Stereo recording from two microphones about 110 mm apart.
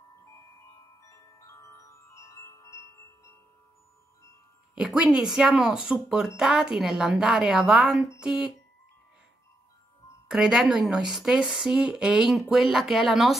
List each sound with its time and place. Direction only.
1.0 s chime: 30° left (ahead or behind)
4.7 s speech: 5° right (ahead or behind)
10.2 s speech: 5° right (ahead or behind)